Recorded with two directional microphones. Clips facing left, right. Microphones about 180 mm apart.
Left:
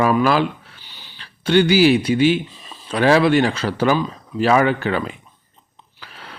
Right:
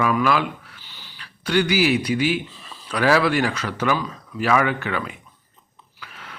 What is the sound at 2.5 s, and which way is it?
Speech, 20° left (ahead or behind).